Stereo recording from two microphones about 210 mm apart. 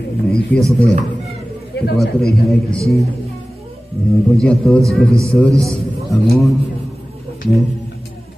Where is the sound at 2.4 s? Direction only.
Centre (ahead or behind).